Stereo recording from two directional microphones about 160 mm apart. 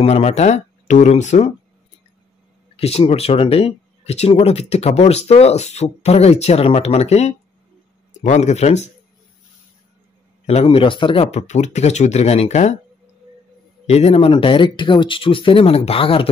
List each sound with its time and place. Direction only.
0.0 s speech: 45° left (ahead or behind)
2.7 s speech: 40° left (ahead or behind)
10.4 s speech: 40° left (ahead or behind)
11.2 s speech: 45° left (ahead or behind)
13.8 s speech: 40° left (ahead or behind)